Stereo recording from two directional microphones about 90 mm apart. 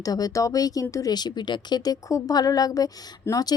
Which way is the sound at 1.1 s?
55° left (ahead or behind).